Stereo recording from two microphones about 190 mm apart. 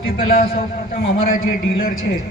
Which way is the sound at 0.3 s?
50° left (ahead or behind).